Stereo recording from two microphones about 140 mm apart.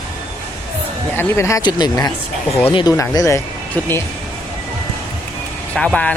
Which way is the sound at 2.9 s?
20° left (ahead or behind).